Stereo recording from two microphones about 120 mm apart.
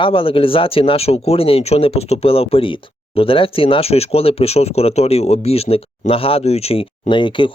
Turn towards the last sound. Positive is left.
turn(degrees=40)  # may be behind; listen again after turning